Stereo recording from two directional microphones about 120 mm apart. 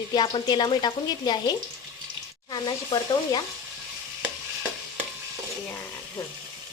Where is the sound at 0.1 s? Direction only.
35° left (ahead or behind).